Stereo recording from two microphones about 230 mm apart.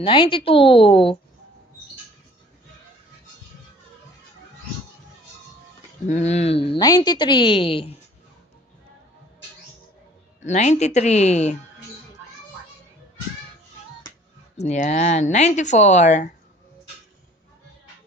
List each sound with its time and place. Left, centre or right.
0.0 s a woman's voice: left
6.0 s a woman's voice: left
10.4 s a woman's voice: left
14.6 s speech: left